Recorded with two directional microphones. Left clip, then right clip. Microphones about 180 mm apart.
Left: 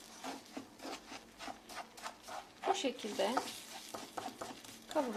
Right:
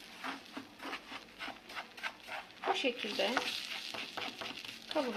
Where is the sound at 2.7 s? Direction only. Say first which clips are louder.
Right 5 dB; centre (ahead or behind).